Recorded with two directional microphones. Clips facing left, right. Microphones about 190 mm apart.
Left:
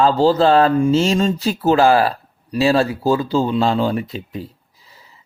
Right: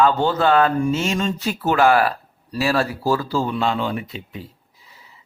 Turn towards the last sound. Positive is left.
turn(degrees=40)  # may be behind; listen again after turning